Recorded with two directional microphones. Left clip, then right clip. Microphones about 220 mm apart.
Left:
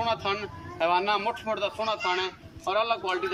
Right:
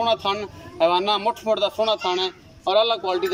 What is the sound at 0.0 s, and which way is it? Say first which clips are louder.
A man's voice: right 6 dB; 15° right (ahead or behind).